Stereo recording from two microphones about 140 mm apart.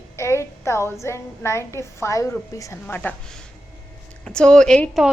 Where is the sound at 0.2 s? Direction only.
20° left (ahead or behind).